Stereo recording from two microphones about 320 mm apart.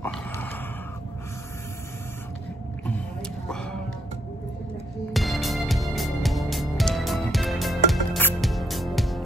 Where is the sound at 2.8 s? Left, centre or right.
Centre.